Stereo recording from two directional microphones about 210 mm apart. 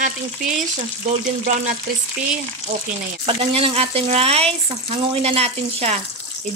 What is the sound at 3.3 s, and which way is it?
A woman's voice, 25° right (ahead or behind).